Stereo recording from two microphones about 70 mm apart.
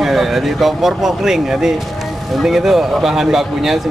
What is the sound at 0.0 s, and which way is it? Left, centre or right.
A man's voice, centre.